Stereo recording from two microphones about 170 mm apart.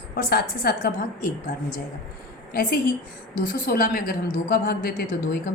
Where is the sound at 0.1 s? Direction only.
65° left (ahead or behind).